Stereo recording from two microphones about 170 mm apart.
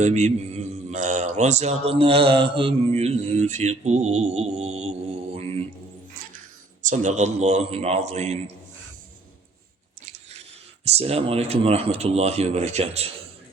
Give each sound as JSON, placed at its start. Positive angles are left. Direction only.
{"t": 0.0, "sound": "a man's voice", "side_deg": -40}
{"t": 5.3, "sound": "mantra", "side_deg": -35}
{"t": 6.8, "sound": "a man's voice", "side_deg": -45}
{"t": 10.1, "sound": "chewing", "side_deg": -40}
{"t": 10.8, "sound": "a man's voice", "side_deg": -35}